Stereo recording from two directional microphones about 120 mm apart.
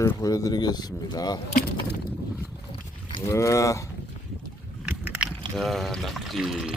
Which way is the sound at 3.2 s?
25° left (ahead or behind).